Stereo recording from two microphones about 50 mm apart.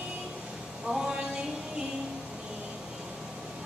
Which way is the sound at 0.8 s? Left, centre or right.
Centre.